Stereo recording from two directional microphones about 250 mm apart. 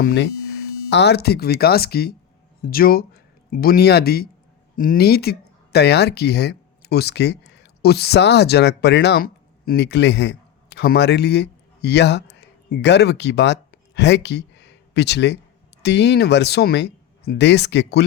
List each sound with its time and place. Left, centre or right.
0.0 s speech: left